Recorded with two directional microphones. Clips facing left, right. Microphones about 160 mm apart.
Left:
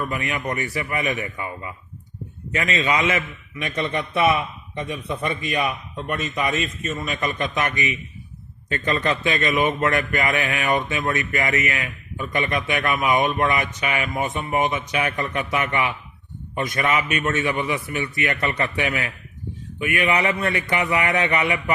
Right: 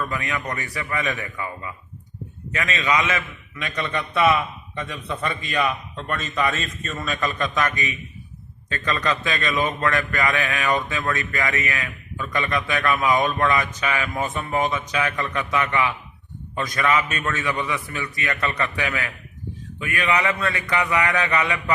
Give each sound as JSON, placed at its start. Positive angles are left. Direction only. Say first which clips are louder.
{"t": 0.0, "sound": "a man's voice", "louder": "left 1 dB", "side_deg": 25}